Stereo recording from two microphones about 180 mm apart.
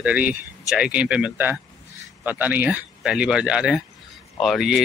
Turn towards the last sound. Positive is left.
turn(degrees=0)  # may be behind; listen again after turning